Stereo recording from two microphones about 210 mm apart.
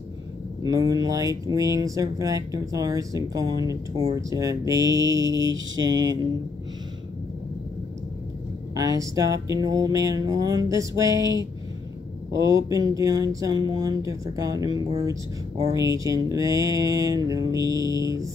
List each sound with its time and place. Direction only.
0.6 s speech: 15° right (ahead or behind)
8.7 s speech: 15° right (ahead or behind)